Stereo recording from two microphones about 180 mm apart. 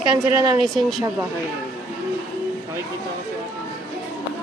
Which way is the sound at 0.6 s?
Centre (ahead or behind).